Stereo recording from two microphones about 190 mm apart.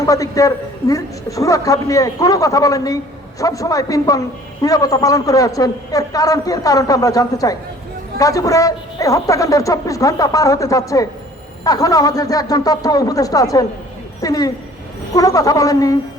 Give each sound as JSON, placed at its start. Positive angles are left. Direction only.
{"t": 0.0, "sound": "a woman's voice", "side_deg": 15}